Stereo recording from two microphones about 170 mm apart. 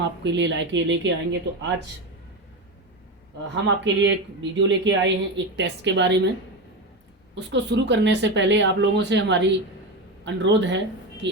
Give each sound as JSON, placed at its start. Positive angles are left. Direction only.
{"t": 0.2, "sound": "speech", "side_deg": -90}
{"t": 3.5, "sound": "speech", "side_deg": -90}
{"t": 7.3, "sound": "speech", "side_deg": -90}